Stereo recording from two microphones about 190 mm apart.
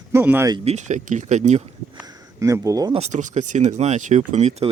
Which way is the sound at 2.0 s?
20° right (ahead or behind).